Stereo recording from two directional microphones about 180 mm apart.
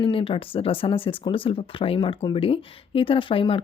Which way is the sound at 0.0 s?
30° left (ahead or behind).